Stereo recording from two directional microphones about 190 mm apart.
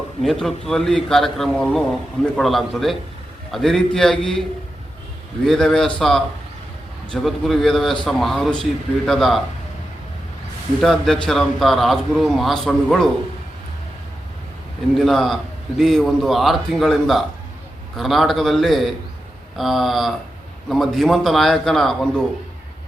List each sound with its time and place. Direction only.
0.2 s a man's voice: centre (ahead or behind)
5.5 s a man's voice: 5° left (ahead or behind)
10.8 s a man's voice: centre (ahead or behind)
14.9 s a man's voice: centre (ahead or behind)